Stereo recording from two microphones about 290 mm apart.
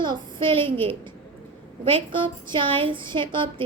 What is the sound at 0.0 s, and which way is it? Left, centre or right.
Speech, centre.